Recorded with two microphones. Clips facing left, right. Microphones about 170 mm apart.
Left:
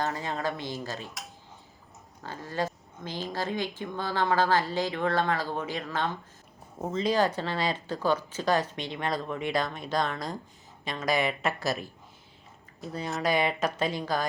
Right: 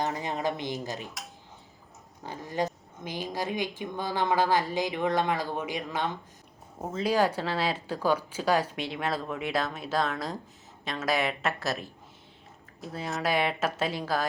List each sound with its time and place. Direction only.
0.0 s speech: 20° right (ahead or behind)
0.9 s dishes: 20° right (ahead or behind)
2.2 s speech: 15° right (ahead or behind)